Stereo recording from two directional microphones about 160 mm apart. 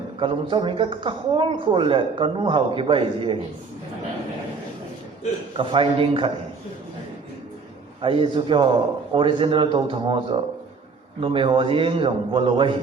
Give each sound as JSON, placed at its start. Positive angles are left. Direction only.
{"t": 0.2, "sound": "speech", "side_deg": -30}
{"t": 5.5, "sound": "speech", "side_deg": -30}
{"t": 8.0, "sound": "speech", "side_deg": -30}